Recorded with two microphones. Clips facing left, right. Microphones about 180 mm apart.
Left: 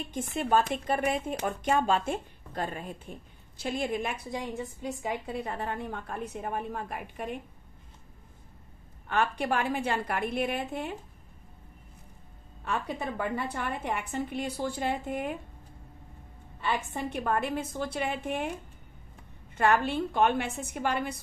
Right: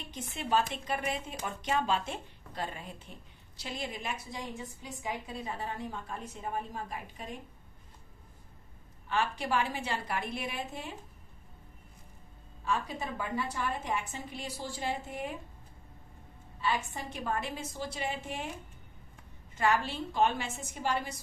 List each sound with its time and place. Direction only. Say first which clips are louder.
0.1 s a woman's voice: left 4 dB; 50° left (ahead or behind)
9.0 s a woman's voice: left 4 dB; 55° left (ahead or behind)
12.6 s a woman's voice: left 2 dB; 60° left (ahead or behind)
16.6 s a woman's voice: left 2 dB; 60° left (ahead or behind)
19.5 s a woman's voice: left 4 dB; 60° left (ahead or behind)